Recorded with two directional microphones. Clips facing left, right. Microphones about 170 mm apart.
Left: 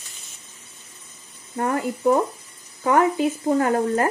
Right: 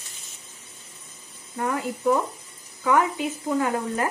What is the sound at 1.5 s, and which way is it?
Speech, 45° left (ahead or behind).